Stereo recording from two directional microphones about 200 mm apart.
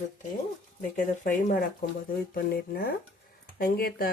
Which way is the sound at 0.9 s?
40° left (ahead or behind).